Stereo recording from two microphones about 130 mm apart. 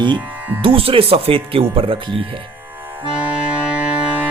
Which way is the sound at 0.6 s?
45° right (ahead or behind).